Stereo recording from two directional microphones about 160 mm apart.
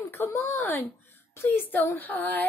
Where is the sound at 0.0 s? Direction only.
15° left (ahead or behind).